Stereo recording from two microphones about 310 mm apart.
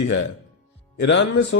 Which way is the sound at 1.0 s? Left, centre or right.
Left.